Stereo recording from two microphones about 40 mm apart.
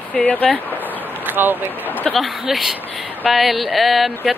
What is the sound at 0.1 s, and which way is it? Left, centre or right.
Speech, left.